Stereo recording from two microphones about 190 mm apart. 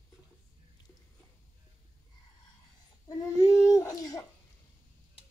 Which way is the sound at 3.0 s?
20° left (ahead or behind).